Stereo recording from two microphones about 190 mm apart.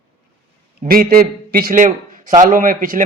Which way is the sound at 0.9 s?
50° right (ahead or behind).